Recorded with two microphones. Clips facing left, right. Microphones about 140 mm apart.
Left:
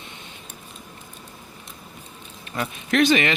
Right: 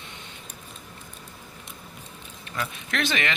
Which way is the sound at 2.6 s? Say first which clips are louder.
Left 9 dB; 20° left (ahead or behind).